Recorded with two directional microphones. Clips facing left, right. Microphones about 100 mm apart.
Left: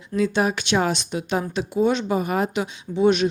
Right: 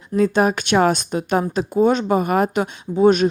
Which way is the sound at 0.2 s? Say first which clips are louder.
Right 4 dB; 45° right (ahead or behind).